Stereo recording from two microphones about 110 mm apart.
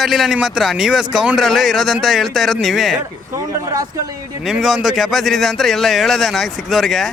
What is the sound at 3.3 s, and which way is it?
Speech, 30° right (ahead or behind).